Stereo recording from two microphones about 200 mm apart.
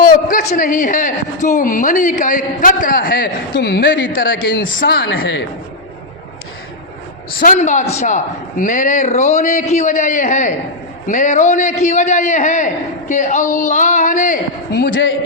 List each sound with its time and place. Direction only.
0.0 s a sound: 45° left (ahead or behind)
0.5 s a woman's voice: 40° left (ahead or behind); by 4.0 s 60° left (ahead or behind)
4.1 s speech: 45° left (ahead or behind)
5.0 s a woman's voice: 75° left (ahead or behind)
7.3 s a woman's voice: 40° left (ahead or behind)